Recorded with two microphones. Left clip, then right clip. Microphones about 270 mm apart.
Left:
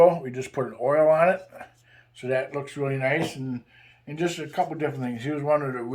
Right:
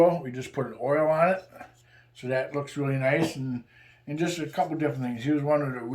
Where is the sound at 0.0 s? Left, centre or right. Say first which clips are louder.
Left 4 dB; centre.